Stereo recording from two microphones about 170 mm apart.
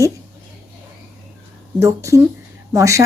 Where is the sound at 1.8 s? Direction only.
15° right (ahead or behind).